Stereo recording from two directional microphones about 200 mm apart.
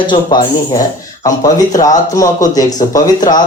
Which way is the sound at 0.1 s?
20° left (ahead or behind).